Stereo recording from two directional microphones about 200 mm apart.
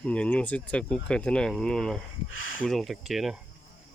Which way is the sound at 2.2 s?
80° left.